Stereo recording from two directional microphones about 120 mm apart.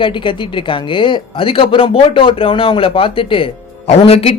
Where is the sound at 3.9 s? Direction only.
55° left (ahead or behind).